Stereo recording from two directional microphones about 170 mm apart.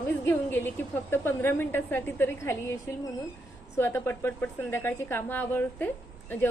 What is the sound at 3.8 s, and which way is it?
Speech, 15° left (ahead or behind).